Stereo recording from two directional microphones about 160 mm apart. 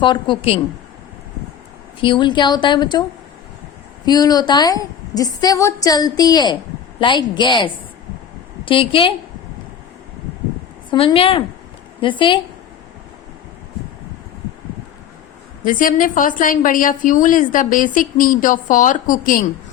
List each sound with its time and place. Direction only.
0.0 s a woman's voice: 30° left (ahead or behind)
2.0 s a woman's voice: 30° left (ahead or behind)
4.0 s a woman's voice: 25° left (ahead or behind)
10.9 s a woman's voice: 35° left (ahead or behind)
15.6 s a woman's voice: 60° left (ahead or behind)